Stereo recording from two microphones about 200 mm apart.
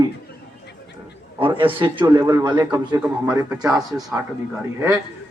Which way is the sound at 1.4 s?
25° right (ahead or behind).